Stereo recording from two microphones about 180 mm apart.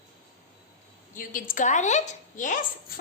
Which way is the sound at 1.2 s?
50° left (ahead or behind).